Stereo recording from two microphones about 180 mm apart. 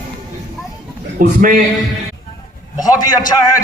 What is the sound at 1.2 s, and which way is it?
Speech, 50° right (ahead or behind).